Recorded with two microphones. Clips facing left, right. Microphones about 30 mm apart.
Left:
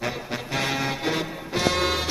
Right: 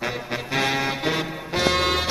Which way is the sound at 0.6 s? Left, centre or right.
Centre.